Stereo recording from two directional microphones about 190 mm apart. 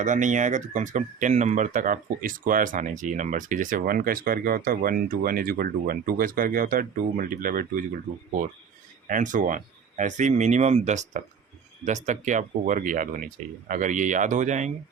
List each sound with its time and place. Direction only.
0.0 s speech: 40° right (ahead or behind)